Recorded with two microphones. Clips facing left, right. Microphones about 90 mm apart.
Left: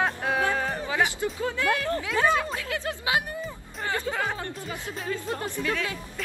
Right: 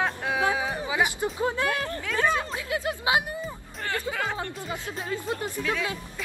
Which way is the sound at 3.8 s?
15° left (ahead or behind).